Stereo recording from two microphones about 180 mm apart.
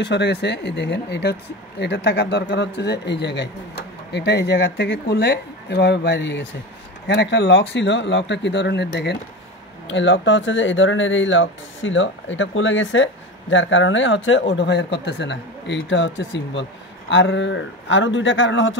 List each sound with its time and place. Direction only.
0.0 s speech: 75° left (ahead or behind)
9.8 s speech: 90° left
14.5 s speech: 75° left (ahead or behind); by 18.8 s 90° left